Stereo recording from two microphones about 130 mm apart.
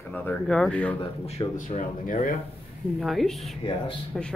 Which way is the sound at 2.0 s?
90° left.